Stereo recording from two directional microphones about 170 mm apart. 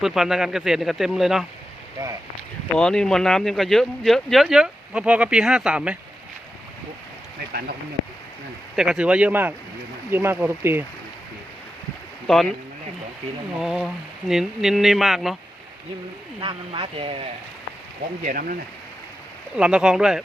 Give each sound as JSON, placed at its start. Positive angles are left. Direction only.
{"t": 0.0, "sound": "speech", "side_deg": -5}
{"t": 2.0, "sound": "speech", "side_deg": -20}
{"t": 2.7, "sound": "speech", "side_deg": 5}
{"t": 8.7, "sound": "speech", "side_deg": -5}
{"t": 13.6, "sound": "speech", "side_deg": 0}
{"t": 16.4, "sound": "speech", "side_deg": -30}
{"t": 18.2, "sound": "speech", "side_deg": -55}
{"t": 19.5, "sound": "speech", "side_deg": -5}